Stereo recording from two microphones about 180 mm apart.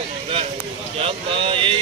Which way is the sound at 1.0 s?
30° right (ahead or behind).